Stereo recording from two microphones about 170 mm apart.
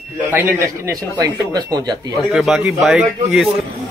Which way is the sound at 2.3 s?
5° right (ahead or behind).